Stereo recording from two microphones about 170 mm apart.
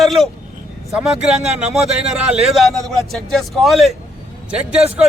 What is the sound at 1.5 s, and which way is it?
A man's voice, 5° right (ahead or behind).